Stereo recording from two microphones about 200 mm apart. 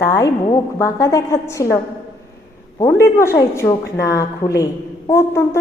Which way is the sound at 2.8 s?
15° left (ahead or behind).